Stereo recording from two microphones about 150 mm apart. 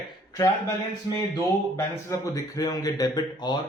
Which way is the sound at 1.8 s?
25° left (ahead or behind).